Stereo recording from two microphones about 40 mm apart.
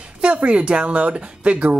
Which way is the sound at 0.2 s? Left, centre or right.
Right.